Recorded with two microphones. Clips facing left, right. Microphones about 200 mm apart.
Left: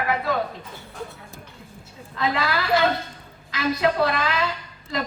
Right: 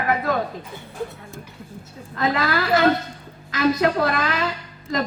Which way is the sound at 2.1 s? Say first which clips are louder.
Right 3 dB; 45° right (ahead or behind).